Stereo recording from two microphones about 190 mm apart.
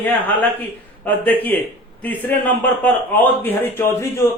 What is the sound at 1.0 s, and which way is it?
A man's voice, 10° left (ahead or behind).